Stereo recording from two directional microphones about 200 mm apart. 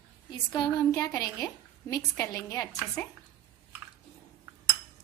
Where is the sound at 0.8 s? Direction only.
15° left (ahead or behind).